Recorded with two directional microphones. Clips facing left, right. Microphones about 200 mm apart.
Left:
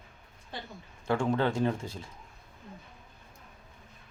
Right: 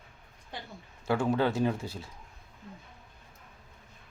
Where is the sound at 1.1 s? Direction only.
5° right (ahead or behind).